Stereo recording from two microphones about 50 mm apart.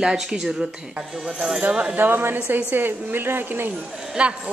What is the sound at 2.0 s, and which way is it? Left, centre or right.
A woman's voice, right.